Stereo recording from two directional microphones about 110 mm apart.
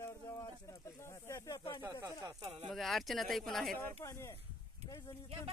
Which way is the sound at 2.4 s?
65° right (ahead or behind).